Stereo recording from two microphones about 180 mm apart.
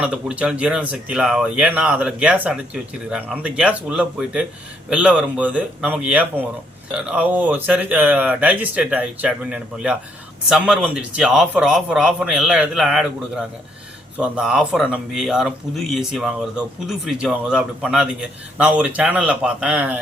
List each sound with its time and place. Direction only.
0.0 s speech: 5° right (ahead or behind)